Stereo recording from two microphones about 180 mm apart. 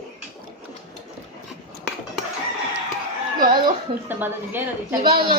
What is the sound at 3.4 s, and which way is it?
Speech, 25° right (ahead or behind).